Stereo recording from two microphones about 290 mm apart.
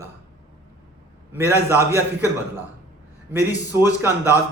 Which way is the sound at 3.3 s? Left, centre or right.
Centre.